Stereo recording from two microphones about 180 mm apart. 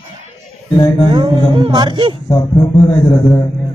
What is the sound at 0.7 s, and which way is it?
Speech, 20° left (ahead or behind).